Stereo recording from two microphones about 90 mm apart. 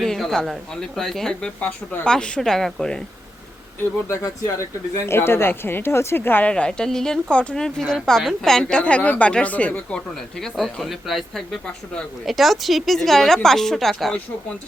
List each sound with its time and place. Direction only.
0.0 s a woman's voice: 5° left (ahead or behind)
4.2 s speech: 35° left (ahead or behind)
6.5 s a woman's voice: 10° left (ahead or behind)
10.4 s a woman's voice: centre (ahead or behind)